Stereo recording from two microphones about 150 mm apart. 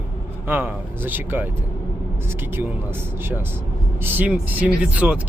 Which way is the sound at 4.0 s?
10° right (ahead or behind).